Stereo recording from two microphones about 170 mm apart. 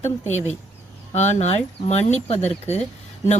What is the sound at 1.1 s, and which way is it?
Speech, 40° left (ahead or behind).